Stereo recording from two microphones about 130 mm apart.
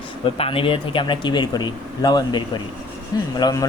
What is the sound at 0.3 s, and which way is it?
Speech, 45° left (ahead or behind).